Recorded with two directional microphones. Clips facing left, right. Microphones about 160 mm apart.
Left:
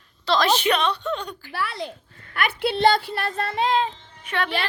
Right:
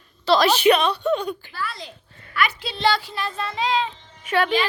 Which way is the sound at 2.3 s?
55° left (ahead or behind).